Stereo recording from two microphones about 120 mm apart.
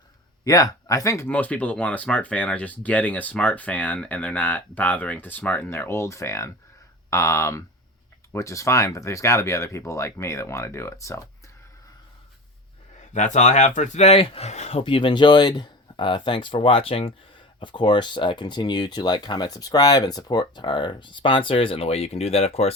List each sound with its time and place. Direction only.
0.4 s speech: 30° left (ahead or behind)
1.3 s speech: 10° left (ahead or behind)
13.1 s speech: 85° left; by 22.7 s 60° left (ahead or behind)